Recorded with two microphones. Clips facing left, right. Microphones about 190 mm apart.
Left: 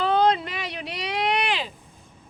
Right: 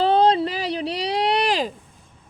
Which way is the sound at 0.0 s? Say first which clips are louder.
Right 4 dB; 30° right (ahead or behind).